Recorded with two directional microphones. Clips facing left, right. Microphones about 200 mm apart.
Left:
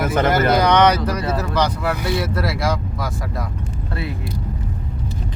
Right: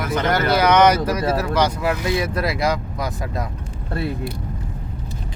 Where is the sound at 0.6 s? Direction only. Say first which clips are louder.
Even; 5° right (ahead or behind).